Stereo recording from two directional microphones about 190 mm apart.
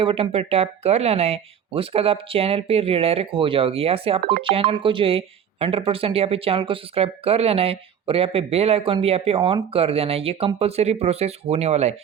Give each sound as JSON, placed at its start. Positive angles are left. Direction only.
{"t": 0.0, "sound": "speech", "side_deg": -30}